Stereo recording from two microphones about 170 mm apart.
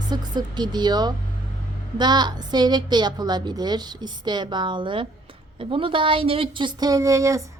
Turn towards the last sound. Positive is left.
turn(degrees=-20)  # may be behind; listen again after turning